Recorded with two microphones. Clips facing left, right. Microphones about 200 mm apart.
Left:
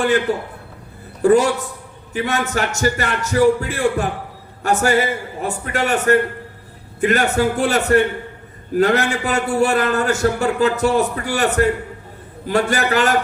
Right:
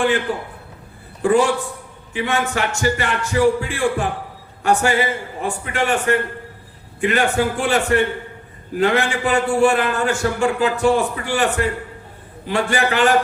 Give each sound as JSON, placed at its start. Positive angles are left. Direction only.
{"t": 1.2, "sound": "a man's voice", "side_deg": 40}